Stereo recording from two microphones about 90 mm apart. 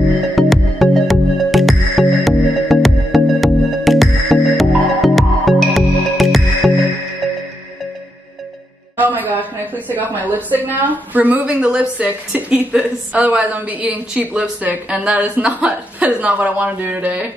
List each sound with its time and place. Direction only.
0.4 s music: centre (ahead or behind)
8.9 s music: 20° right (ahead or behind)
9.3 s a sound: 20° left (ahead or behind)
10.1 s a woman's voice: 20° right (ahead or behind)